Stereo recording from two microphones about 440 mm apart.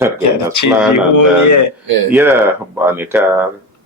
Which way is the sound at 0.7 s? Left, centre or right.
Centre.